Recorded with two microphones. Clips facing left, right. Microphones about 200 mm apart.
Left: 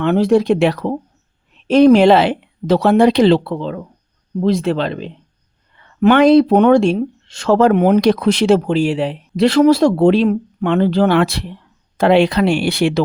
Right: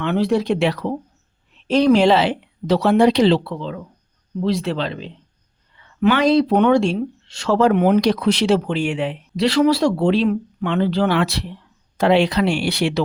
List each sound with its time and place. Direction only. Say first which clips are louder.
0.0 s speech: left 6 dB; 45° left (ahead or behind)
9.3 s speech: left 5 dB; 50° left (ahead or behind)